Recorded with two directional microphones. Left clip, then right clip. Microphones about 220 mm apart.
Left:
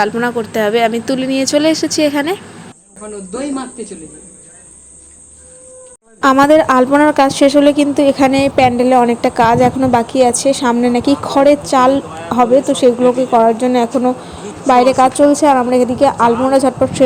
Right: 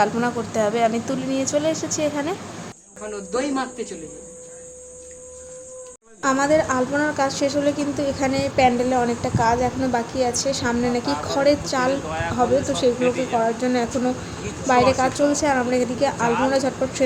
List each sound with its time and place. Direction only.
0.0 s speech: 15° left (ahead or behind)
3.3 s a woman's voice: 30° left (ahead or behind)
6.1 s a woman's voice: 40° left (ahead or behind)